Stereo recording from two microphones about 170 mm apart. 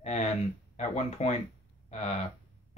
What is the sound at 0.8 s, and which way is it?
Speech, 40° left (ahead or behind).